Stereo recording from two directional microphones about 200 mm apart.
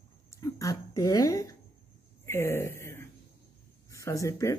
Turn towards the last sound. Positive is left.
turn(degrees=15)  # may be behind; listen again after turning